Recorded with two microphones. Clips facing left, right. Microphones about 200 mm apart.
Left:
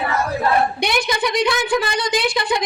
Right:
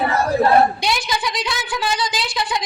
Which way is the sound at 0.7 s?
60° left (ahead or behind).